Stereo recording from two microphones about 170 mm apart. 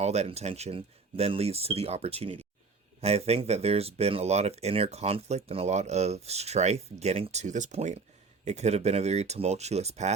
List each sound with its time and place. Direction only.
0.0 s speech: 40° right (ahead or behind)